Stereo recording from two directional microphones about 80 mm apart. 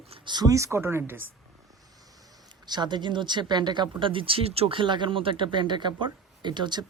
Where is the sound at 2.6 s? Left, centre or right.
Right.